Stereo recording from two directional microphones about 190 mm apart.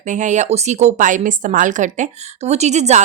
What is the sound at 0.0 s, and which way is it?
A woman's voice, 40° right (ahead or behind).